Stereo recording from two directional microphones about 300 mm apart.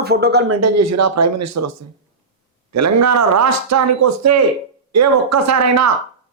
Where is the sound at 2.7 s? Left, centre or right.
Right.